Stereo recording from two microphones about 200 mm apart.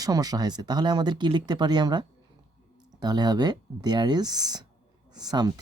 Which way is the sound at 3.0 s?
20° right (ahead or behind).